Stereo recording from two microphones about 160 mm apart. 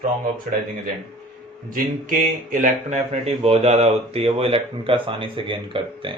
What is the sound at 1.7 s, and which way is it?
Speech, 55° right (ahead or behind).